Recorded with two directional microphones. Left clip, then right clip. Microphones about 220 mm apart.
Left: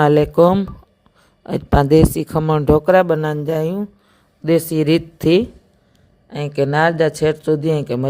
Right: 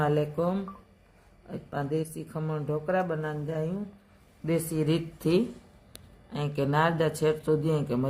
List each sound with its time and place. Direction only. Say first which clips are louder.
0.0 s a woman's voice: left 15 dB; 40° left (ahead or behind)